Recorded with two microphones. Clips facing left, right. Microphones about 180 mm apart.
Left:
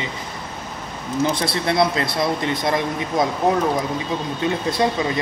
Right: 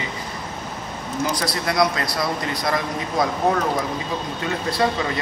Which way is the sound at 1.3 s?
25° left (ahead or behind).